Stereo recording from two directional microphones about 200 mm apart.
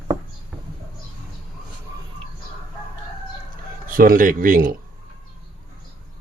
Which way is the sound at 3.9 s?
45° right (ahead or behind).